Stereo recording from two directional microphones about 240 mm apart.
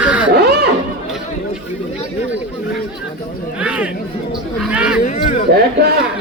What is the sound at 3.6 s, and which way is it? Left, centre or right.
Speech, centre.